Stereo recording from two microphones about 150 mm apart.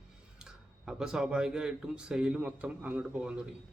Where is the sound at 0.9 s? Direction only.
5° right (ahead or behind).